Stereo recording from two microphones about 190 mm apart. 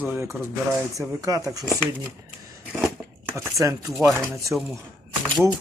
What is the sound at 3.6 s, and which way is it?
Speech, 15° right (ahead or behind).